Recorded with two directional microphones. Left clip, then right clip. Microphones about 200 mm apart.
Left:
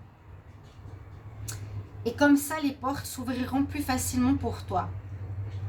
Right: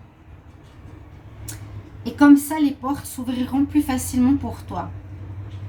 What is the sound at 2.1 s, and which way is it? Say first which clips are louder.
A woman's voice: right 9 dB; 45° left (ahead or behind).